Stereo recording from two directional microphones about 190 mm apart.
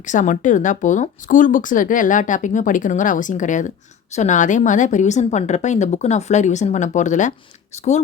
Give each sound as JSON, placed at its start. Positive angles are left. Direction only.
{"t": 0.0, "sound": "speech", "side_deg": 40}